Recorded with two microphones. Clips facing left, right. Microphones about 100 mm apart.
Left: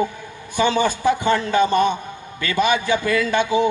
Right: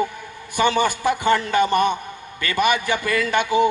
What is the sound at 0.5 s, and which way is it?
Speech, 55° right (ahead or behind).